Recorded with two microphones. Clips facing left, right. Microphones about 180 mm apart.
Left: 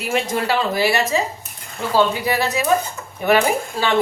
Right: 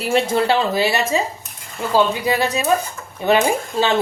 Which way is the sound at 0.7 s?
20° right (ahead or behind).